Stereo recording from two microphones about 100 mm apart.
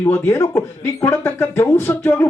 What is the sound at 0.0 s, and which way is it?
Speech, 25° left (ahead or behind).